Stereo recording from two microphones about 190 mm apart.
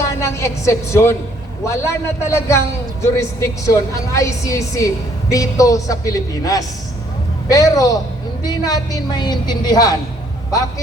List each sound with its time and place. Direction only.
0.2 s a man's voice: 15° left (ahead or behind)